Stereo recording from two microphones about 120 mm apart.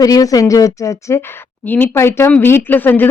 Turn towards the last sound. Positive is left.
turn(degrees=15)  # may be behind; listen again after turning